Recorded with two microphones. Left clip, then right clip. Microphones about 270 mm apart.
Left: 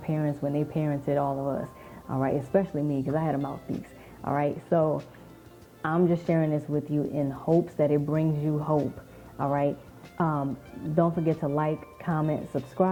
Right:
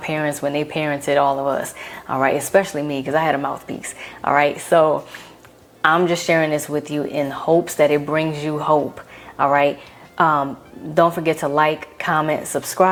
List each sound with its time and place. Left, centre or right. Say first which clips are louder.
0.0 s speech: right 9 dB; centre
8.5 s speech: right 12 dB; right
9.4 s speech: right 11 dB; centre